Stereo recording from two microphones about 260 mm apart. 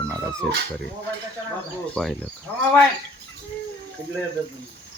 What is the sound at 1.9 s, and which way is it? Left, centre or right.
Speech, centre.